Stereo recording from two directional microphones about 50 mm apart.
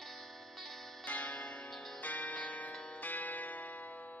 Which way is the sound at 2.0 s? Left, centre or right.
Left.